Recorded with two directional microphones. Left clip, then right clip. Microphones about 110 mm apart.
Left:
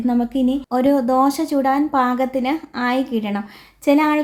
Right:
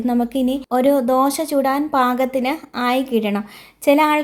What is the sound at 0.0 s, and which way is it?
Speech, 40° right (ahead or behind).